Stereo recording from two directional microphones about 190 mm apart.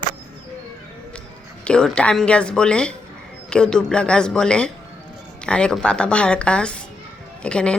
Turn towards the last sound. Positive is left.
turn(degrees=5)  # may be behind; listen again after turning